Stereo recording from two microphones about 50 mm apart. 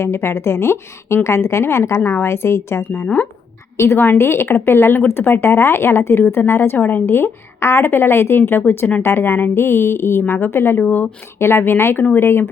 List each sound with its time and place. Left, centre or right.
0.0 s a woman's voice: left
5.5 s a woman's voice: left
6.7 s speech: left
7.0 s a woman's voice: left
7.9 s speech: left